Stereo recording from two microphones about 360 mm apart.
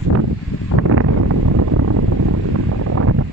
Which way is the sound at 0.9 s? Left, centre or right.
Right.